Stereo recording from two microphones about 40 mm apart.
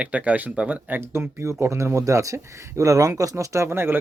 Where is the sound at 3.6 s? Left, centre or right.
Right.